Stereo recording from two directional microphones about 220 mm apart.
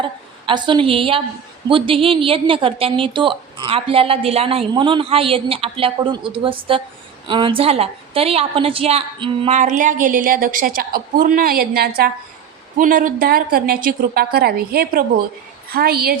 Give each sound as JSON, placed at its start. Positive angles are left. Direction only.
{"t": 0.0, "sound": "a woman's voice", "side_deg": -20}